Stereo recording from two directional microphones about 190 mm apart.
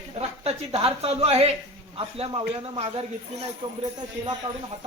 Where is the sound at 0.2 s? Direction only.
30° right (ahead or behind).